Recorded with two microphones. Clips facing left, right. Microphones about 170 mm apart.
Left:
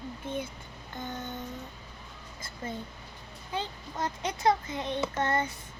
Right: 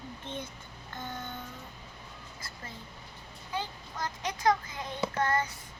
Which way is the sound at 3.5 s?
25° left (ahead or behind).